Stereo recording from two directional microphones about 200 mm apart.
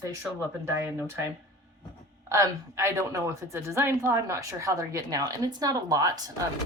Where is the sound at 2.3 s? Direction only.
15° right (ahead or behind).